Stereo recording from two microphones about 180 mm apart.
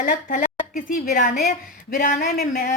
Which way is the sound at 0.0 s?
50° left (ahead or behind).